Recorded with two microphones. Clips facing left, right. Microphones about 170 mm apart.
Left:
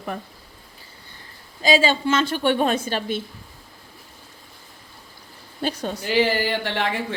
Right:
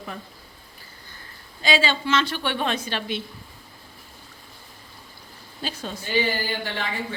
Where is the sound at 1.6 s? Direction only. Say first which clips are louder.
Left 4 dB; 45° left (ahead or behind).